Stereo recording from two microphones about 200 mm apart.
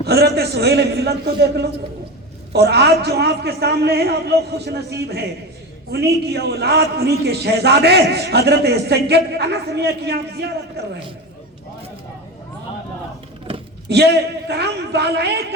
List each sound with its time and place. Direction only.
0.0 s a man's voice: 55° right (ahead or behind)
13.8 s a man's voice: 55° right (ahead or behind)